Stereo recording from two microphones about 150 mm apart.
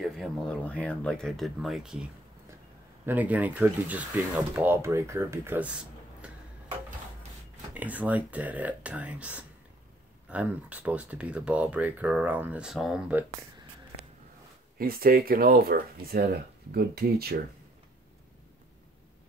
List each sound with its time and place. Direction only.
0.0 s speech: 5° left (ahead or behind)
3.1 s speech: 10° right (ahead or behind)
6.2 s tick-tock: 10° right (ahead or behind)
7.7 s speech: 10° right (ahead or behind)
14.8 s speech: 80° right
16.7 s speech: 90° right